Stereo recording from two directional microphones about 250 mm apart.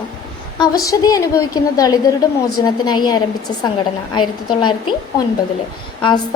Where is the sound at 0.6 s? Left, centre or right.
Centre.